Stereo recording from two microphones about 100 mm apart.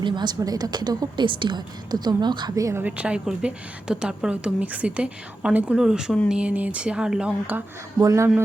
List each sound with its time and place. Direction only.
0.0 s a woman's voice: 45° right (ahead or behind)
2.6 s speech: 30° right (ahead or behind)
2.8 s a woman's voice: 10° right (ahead or behind)
7.9 s speech: 30° right (ahead or behind)